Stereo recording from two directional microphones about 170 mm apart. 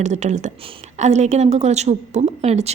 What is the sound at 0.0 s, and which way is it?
A woman's voice, 45° right (ahead or behind).